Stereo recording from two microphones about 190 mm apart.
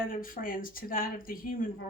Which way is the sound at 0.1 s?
45° left (ahead or behind).